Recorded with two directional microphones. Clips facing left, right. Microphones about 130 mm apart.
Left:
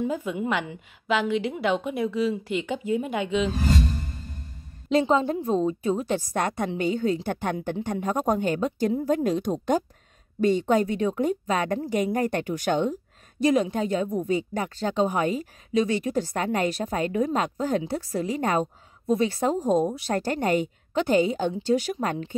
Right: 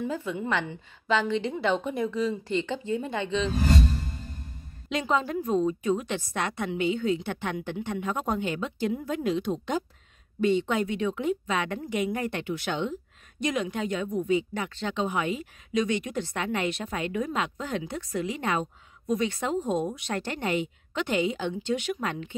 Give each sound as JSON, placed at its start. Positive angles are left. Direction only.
{"t": 0.0, "sound": "a woman's voice", "side_deg": 15}
{"t": 4.8, "sound": "speech", "side_deg": 35}